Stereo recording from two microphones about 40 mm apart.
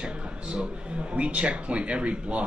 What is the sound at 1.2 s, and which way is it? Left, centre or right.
Speech, right.